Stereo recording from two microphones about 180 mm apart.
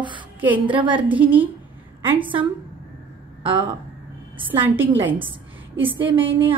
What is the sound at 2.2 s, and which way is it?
Speech, 30° right (ahead or behind).